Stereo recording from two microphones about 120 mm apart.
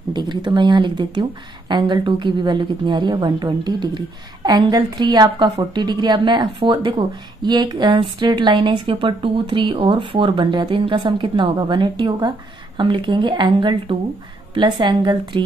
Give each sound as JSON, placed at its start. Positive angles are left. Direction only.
{"t": 0.1, "sound": "speech", "side_deg": -40}